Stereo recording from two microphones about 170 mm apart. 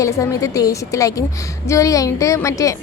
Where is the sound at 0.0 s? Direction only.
20° left (ahead or behind).